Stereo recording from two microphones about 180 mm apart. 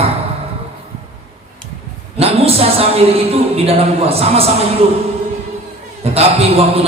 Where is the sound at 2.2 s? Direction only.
35° right (ahead or behind).